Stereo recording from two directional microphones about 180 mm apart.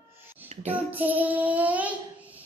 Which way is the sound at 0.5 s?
35° right (ahead or behind).